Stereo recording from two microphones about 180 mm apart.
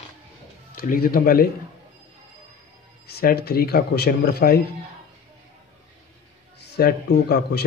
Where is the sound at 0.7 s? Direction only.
50° left (ahead or behind).